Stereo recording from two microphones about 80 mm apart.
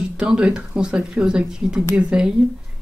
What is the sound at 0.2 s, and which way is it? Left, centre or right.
Speech, centre.